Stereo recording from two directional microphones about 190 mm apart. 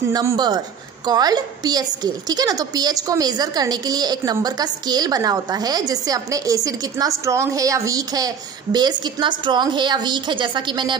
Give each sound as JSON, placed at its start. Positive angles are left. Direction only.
{"t": 0.1, "sound": "a woman's voice", "side_deg": -20}